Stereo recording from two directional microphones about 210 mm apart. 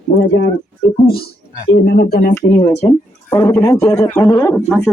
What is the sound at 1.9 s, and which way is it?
Speech, 50° left (ahead or behind).